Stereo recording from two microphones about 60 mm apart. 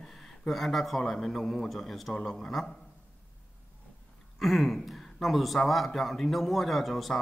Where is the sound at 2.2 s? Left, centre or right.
Centre.